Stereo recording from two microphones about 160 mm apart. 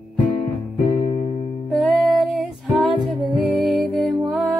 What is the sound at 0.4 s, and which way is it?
Music, 35° left (ahead or behind).